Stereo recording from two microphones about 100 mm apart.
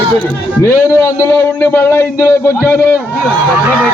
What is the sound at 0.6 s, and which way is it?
A man's voice, 25° left (ahead or behind).